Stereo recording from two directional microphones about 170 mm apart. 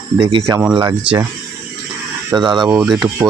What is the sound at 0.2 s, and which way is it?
Speech, 30° right (ahead or behind).